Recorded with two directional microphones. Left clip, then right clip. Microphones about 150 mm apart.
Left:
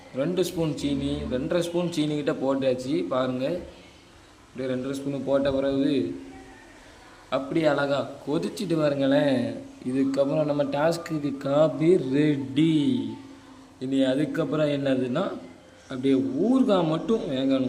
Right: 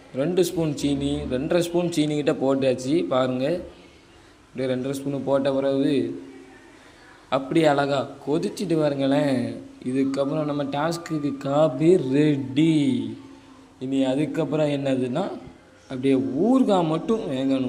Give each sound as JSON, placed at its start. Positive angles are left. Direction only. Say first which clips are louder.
{"t": 0.2, "sound": "speech", "louder": "right 3 dB", "side_deg": -15}
{"t": 7.3, "sound": "speech", "louder": "right 4 dB", "side_deg": -25}
{"t": 9.9, "sound": "speech", "louder": "even", "side_deg": -10}
{"t": 13.7, "sound": "speech", "louder": "right 1 dB", "side_deg": -5}